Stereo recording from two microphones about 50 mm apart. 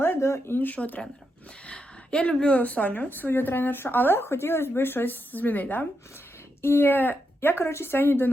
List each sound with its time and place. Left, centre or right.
0.4 s speech: left
0.7 s speech: left
1.6 s a sound: left
2.4 s speech: left
6.6 s speech: left